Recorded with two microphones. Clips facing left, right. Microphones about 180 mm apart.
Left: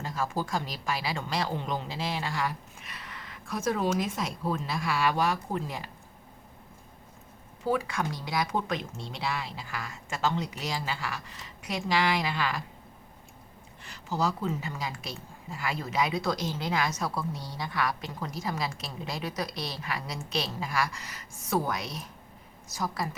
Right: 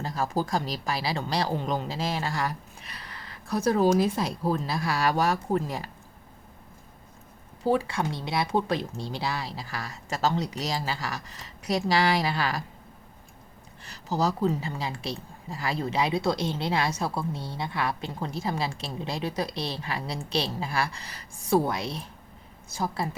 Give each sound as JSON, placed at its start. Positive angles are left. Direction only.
{"t": 0.0, "sound": "speech", "side_deg": -35}
{"t": 7.6, "sound": "speech", "side_deg": -30}
{"t": 13.8, "sound": "a woman's voice", "side_deg": -40}